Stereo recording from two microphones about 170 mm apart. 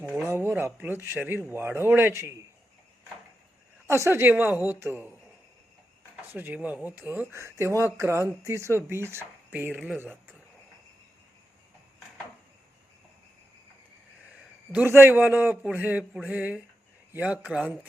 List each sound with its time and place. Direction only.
0.3 s speech: 15° right (ahead or behind)
3.8 s speech: 15° right (ahead or behind)
6.3 s speech: 10° right (ahead or behind)
14.7 s speech: 10° right (ahead or behind)